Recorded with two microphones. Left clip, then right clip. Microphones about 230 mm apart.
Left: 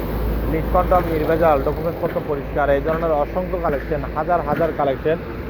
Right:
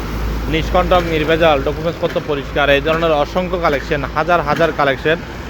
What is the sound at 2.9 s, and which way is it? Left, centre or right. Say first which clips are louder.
Speech: right 5 dB; right.